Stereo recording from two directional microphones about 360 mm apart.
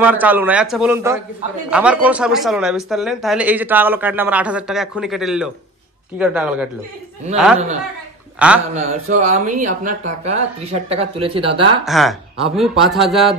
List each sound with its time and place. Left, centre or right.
0.0 s speech: centre
8.4 s speech: centre
8.7 s speech: centre
11.8 s speech: centre